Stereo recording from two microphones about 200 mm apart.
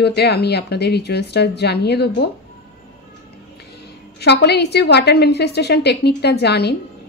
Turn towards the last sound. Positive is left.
turn(degrees=55)  # may be behind; listen again after turning